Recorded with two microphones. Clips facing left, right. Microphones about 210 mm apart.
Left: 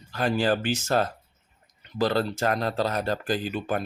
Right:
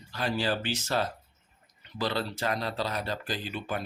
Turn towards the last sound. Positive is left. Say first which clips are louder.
# left 6 dB
turn(degrees=45)  # may be behind; listen again after turning